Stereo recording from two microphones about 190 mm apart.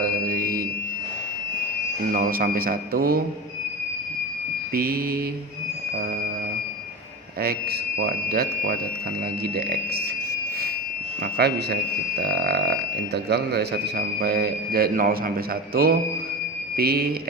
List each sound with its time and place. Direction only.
0.0 s mantra: 50° right (ahead or behind)
2.1 s a man's voice: 50° right (ahead or behind)
4.7 s a man's voice: 50° right (ahead or behind)
7.4 s a man's voice: 55° right (ahead or behind)
11.2 s a man's voice: 55° right (ahead or behind)